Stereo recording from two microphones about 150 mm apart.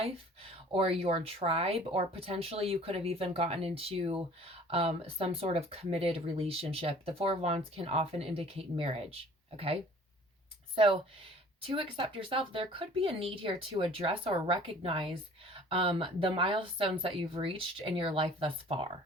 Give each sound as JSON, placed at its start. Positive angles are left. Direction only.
{"t": 0.7, "sound": "speech", "side_deg": -40}
{"t": 10.8, "sound": "speech", "side_deg": -35}